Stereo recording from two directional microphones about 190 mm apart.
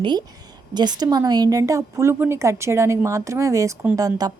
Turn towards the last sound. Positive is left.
turn(degrees=-20)  # may be behind; listen again after turning